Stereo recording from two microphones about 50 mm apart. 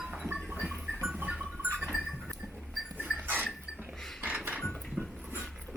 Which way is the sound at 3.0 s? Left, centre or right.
Right.